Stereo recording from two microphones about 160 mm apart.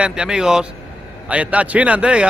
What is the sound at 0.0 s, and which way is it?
A man's voice, 5° right (ahead or behind).